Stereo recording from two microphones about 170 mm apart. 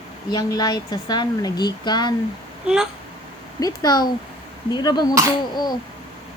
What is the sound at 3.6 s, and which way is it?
A woman's voice, 25° left (ahead or behind).